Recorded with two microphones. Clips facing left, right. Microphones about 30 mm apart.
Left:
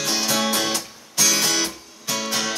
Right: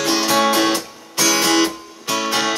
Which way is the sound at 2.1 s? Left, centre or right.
Right.